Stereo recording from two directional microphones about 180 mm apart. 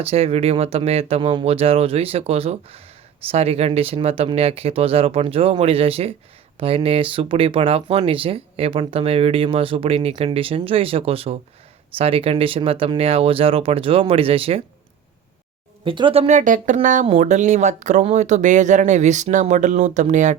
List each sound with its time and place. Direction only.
0.0 s speech: 35° right (ahead or behind)
15.8 s speech: 30° right (ahead or behind)